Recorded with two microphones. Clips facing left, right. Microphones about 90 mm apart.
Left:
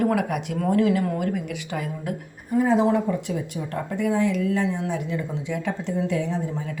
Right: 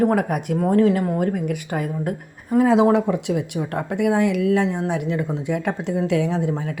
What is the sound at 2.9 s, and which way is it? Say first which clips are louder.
A woman's voice: right 4 dB; 70° right (ahead or behind).